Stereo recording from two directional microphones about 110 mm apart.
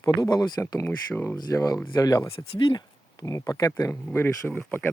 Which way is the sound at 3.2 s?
30° left (ahead or behind).